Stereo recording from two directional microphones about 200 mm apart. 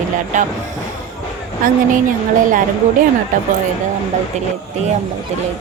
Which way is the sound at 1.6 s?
40° right (ahead or behind).